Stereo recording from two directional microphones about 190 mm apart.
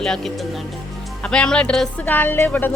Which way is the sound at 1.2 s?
5° left (ahead or behind).